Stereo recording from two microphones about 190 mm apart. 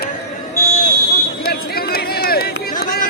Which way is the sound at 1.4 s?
55° left (ahead or behind).